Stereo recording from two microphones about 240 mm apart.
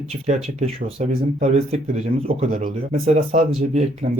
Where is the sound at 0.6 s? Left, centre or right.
Right.